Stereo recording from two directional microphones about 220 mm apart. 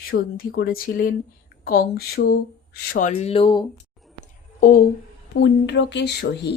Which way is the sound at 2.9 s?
30° left (ahead or behind).